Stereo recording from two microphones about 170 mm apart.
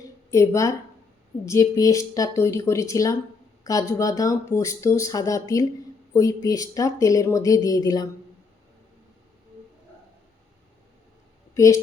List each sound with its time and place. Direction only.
0.0 s a sound: 15° left (ahead or behind)
1.5 s speech: 20° left (ahead or behind)
11.5 s speech: 15° left (ahead or behind)